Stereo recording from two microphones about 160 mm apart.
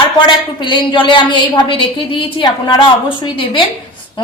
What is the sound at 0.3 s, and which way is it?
A woman's voice, 30° left (ahead or behind).